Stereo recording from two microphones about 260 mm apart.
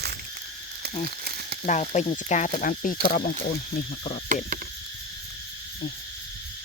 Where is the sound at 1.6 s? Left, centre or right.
Left.